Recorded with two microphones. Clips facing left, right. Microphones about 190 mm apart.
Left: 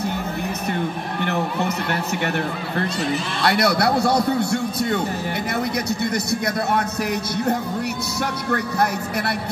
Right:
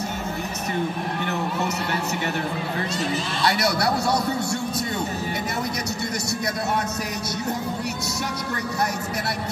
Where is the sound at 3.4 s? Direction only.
60° left (ahead or behind).